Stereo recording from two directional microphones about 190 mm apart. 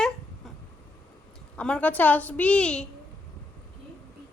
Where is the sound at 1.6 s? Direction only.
5° left (ahead or behind).